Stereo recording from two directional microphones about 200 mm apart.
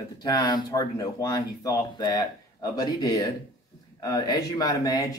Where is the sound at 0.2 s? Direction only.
20° left (ahead or behind).